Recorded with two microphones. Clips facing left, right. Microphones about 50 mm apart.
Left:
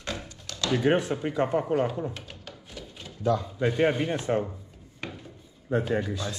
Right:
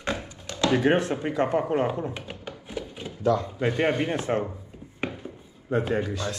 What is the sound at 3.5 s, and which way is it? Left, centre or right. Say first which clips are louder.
Speech: even; right.